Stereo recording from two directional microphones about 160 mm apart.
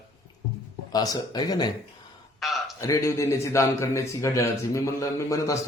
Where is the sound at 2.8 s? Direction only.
20° left (ahead or behind).